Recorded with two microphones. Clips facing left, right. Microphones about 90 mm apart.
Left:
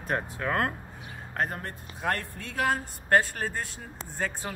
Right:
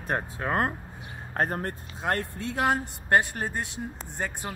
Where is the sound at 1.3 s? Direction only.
40° right (ahead or behind).